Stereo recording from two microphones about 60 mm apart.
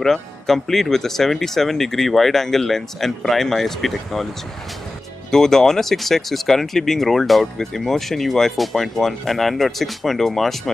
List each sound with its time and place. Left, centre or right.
0.0 s speech: centre
5.3 s speech: centre